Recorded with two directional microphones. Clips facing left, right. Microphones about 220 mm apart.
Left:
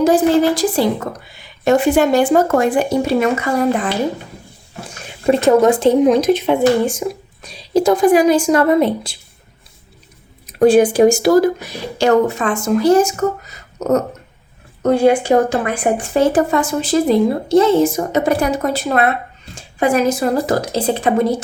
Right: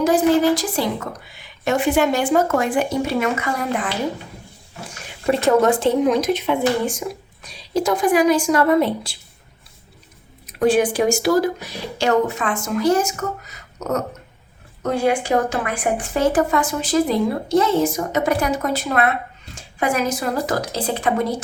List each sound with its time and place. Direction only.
0.0 s speech: 30° left (ahead or behind)
5.2 s speech: 20° left (ahead or behind)
10.4 s speech: 35° left (ahead or behind)